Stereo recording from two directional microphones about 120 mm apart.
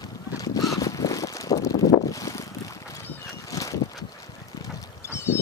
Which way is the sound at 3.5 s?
25° left (ahead or behind).